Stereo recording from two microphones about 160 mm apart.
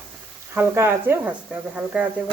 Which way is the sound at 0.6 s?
15° right (ahead or behind).